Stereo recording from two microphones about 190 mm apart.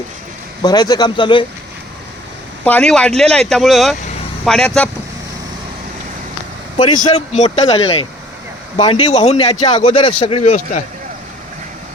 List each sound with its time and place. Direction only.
0.6 s speech: 20° left (ahead or behind)
2.6 s speech: 5° left (ahead or behind)
6.7 s speech: 25° left (ahead or behind)
7.3 s speech: 35° left (ahead or behind)